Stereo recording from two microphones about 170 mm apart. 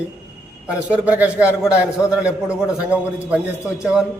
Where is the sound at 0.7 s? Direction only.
10° right (ahead or behind).